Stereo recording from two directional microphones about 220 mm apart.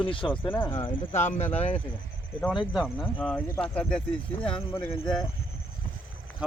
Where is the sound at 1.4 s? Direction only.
30° left (ahead or behind).